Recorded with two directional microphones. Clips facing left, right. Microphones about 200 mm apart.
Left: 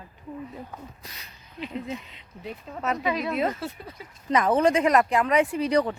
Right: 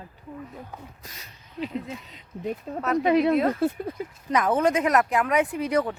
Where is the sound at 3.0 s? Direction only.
55° right (ahead or behind).